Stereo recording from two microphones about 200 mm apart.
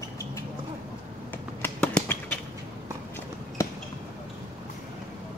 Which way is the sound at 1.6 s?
5° left (ahead or behind).